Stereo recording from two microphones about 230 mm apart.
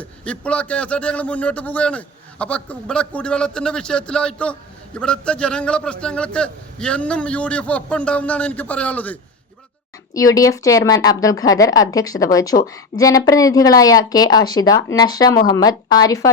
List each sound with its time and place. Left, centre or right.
0.0 s speech: centre
10.2 s speech: centre